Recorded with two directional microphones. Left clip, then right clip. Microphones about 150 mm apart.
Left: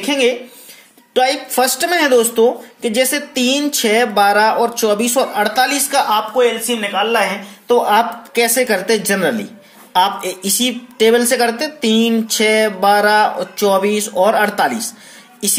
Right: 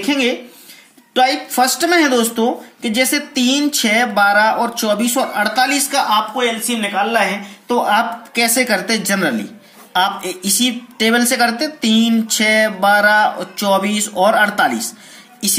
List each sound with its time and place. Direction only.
0.0 s a woman's voice: 25° left (ahead or behind)